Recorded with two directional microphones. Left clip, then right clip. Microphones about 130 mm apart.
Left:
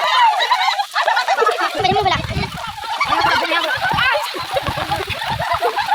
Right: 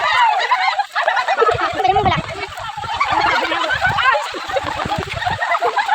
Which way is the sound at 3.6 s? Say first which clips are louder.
Right 1 dB; 70° right (ahead or behind).